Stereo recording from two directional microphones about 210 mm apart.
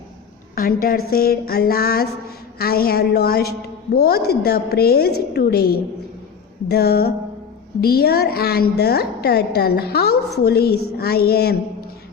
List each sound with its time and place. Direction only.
0.5 s a woman's voice: 45° left (ahead or behind)